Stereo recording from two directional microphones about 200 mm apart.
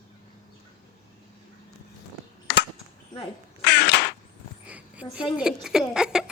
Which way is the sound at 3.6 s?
55° left (ahead or behind).